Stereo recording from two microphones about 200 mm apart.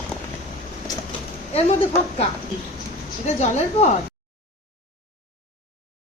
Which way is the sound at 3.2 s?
35° left (ahead or behind).